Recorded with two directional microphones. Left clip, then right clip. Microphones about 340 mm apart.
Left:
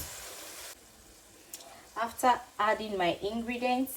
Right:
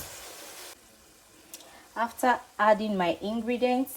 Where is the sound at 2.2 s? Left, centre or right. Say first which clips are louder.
Right 1 dB; right.